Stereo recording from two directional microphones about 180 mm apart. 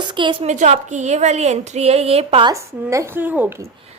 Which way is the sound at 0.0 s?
25° right (ahead or behind).